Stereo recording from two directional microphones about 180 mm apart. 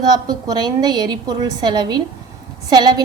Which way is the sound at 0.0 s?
25° right (ahead or behind).